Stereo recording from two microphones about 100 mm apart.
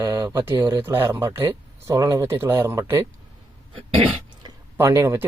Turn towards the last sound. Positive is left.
turn(degrees=-30)  # may be behind; listen again after turning